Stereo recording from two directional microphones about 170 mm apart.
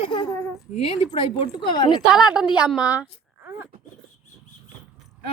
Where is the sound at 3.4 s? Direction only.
15° right (ahead or behind).